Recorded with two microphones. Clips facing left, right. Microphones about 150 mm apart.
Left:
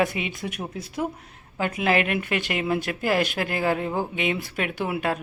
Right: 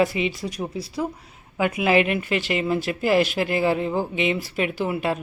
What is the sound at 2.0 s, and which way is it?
Speech, 50° left (ahead or behind).